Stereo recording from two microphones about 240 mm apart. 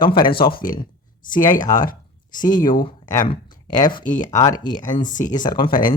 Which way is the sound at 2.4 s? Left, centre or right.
Centre.